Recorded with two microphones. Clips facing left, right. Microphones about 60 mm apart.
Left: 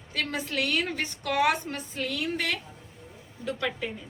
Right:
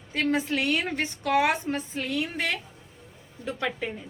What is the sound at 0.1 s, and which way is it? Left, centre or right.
A woman's voice, right.